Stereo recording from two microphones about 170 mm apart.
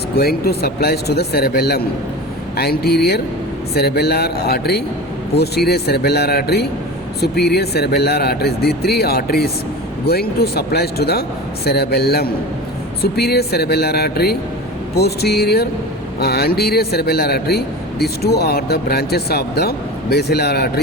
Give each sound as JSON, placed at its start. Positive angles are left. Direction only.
{"t": 0.2, "sound": "speech", "side_deg": 70}